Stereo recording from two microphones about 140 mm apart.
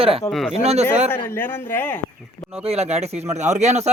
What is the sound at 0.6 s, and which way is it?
Speech, 50° right (ahead or behind).